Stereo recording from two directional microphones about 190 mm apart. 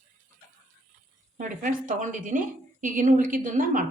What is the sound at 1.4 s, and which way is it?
A woman's voice, 45° right (ahead or behind).